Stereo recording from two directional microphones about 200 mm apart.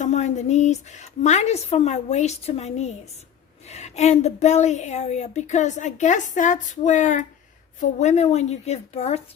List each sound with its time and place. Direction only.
0.0 s a woman's voice: 35° left (ahead or behind)